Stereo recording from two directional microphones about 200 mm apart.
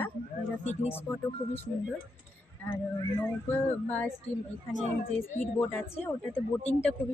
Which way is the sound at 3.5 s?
10° left (ahead or behind).